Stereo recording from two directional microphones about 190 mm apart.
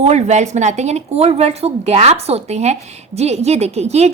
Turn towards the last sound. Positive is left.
turn(degrees=-35)  # may be behind; listen again after turning